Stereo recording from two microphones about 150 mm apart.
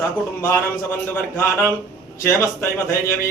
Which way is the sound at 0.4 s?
15° left (ahead or behind).